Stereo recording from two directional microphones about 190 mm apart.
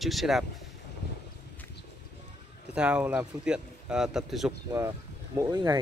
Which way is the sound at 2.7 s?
5° right (ahead or behind).